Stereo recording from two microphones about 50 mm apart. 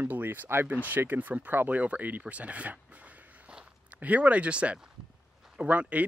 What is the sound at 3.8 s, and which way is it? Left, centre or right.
Speech, right.